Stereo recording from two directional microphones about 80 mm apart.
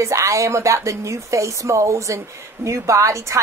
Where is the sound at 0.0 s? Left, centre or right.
Right.